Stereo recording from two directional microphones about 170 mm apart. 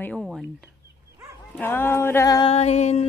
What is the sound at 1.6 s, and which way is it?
Speech, 15° left (ahead or behind).